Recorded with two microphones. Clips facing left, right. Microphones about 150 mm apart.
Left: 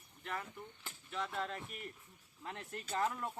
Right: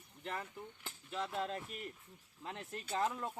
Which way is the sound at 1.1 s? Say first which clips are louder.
Right 1 dB; 25° right (ahead or behind).